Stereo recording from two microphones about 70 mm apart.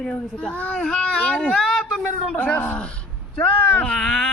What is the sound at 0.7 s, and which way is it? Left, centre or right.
Speech, centre.